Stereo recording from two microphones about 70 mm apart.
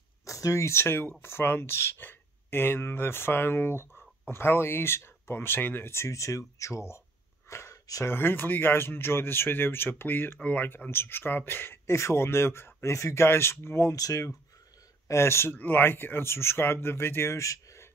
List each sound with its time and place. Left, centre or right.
0.2 s speech: left
7.4 s a sound: left
8.0 s speech: left
15.0 s speech: left
15.5 s speech: left